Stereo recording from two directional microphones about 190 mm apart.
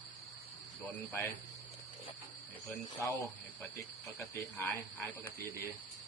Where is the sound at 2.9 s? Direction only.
15° left (ahead or behind).